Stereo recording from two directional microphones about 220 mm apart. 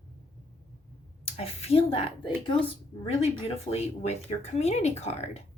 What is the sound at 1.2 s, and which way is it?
Speech, 25° left (ahead or behind).